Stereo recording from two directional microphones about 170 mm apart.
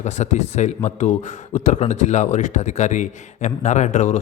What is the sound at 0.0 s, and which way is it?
Speech, 45° left (ahead or behind).